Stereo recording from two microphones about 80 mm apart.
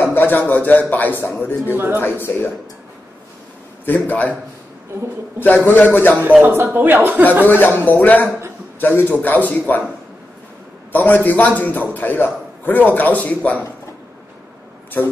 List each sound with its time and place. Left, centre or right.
0.0 s a man's voice: left
3.8 s a man's voice: left
5.7 s a man's voice: left
6.2 s speech: right
7.4 s a man's voice: left
10.9 s a man's voice: left
15.0 s a man's voice: left